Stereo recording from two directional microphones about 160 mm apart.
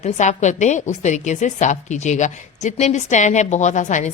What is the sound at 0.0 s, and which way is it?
A woman's voice, 45° left (ahead or behind).